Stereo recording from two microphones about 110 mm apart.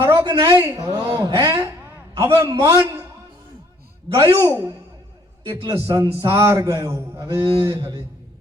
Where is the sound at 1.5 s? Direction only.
25° right (ahead or behind).